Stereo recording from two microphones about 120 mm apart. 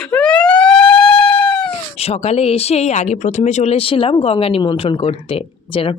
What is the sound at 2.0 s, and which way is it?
Speech, 60° left (ahead or behind).